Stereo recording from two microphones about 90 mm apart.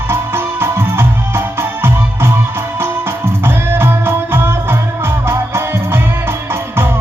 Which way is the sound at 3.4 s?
25° right (ahead or behind).